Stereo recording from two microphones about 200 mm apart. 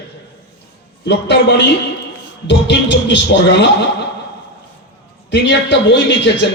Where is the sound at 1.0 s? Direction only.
60° left (ahead or behind).